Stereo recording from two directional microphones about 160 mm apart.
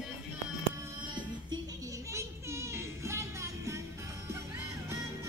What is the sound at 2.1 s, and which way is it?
Music, 15° right (ahead or behind).